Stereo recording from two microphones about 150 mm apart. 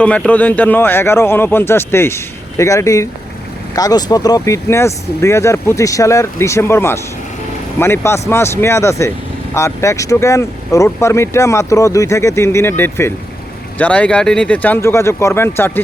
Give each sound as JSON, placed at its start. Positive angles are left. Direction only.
{"t": 0.0, "sound": "speech", "side_deg": 10}